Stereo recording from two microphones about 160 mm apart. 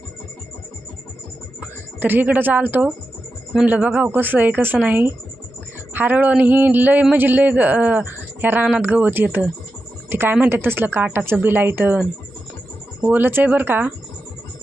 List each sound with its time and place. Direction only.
1.6 s speech: 10° right (ahead or behind)
13.1 s speech: 10° right (ahead or behind)